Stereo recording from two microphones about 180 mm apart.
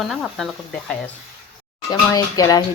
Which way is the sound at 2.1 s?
20° left (ahead or behind).